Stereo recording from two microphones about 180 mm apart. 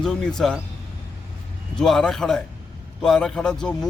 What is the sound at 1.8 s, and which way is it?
Speech, 5° left (ahead or behind).